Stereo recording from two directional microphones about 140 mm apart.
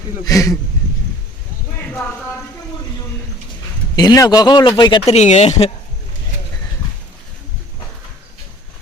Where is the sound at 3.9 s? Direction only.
25° left (ahead or behind).